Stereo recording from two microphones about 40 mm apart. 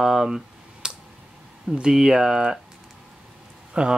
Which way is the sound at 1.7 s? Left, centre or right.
Centre.